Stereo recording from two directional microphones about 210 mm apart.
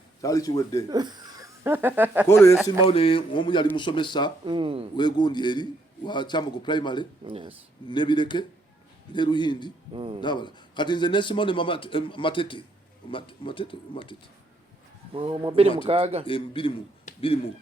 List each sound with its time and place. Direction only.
0.2 s speech: 15° left (ahead or behind)
0.9 s speech: 20° right (ahead or behind)
2.2 s speech: 10° left (ahead or behind)
2.8 s a man's voice: 25° left (ahead or behind)
4.4 s speech: 25° right (ahead or behind)
4.9 s a man's voice: 20° left (ahead or behind)
7.3 s speech: 25° right (ahead or behind)
7.9 s a man's voice: 20° left (ahead or behind)
9.9 s speech: 25° right (ahead or behind)
10.2 s a man's voice: 20° left (ahead or behind)
15.1 s speech: 25° right (ahead or behind)
16.2 s a man's voice: 25° left (ahead or behind)